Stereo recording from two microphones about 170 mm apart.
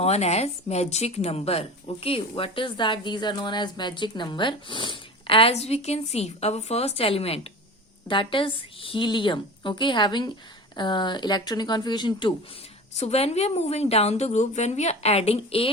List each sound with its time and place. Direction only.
0.0 s a woman's voice: 40° left (ahead or behind)
12.9 s a woman's voice: 40° left (ahead or behind)